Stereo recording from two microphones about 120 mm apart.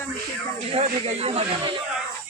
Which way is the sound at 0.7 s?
60° right (ahead or behind).